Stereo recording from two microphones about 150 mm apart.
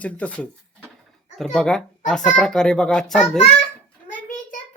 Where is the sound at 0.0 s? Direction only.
10° left (ahead or behind).